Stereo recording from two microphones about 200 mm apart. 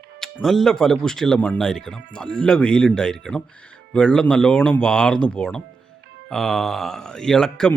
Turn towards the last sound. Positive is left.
turn(degrees=5)  # may be behind; listen again after turning